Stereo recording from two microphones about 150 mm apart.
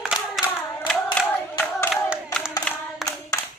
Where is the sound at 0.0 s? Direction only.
5° right (ahead or behind).